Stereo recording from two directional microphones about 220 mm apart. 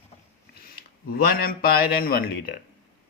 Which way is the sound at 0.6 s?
45° left (ahead or behind).